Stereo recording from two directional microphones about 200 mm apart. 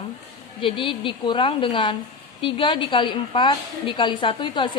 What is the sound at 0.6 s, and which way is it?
A woman's voice, 25° left (ahead or behind).